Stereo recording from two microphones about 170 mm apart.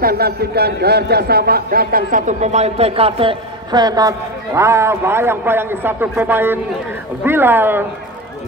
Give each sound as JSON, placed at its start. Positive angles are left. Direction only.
{"t": 0.0, "sound": "a man's voice", "side_deg": -65}